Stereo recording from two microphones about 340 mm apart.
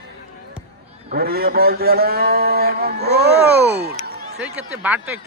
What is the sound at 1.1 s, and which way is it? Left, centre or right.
Speech, right.